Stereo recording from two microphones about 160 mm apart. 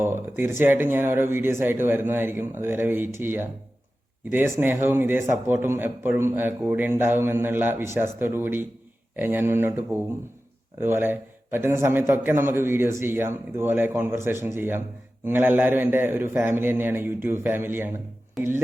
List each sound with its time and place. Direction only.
0.0 s a man's voice: 15° right (ahead or behind)